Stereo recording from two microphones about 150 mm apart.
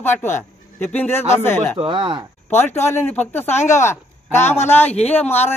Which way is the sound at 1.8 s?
35° right (ahead or behind).